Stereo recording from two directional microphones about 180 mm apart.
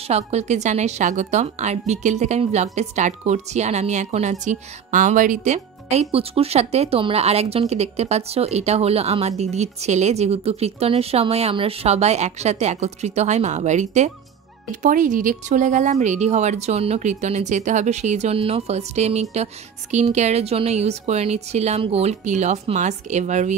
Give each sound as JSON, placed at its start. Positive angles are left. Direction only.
{"t": 0.0, "sound": "a woman's voice", "side_deg": -35}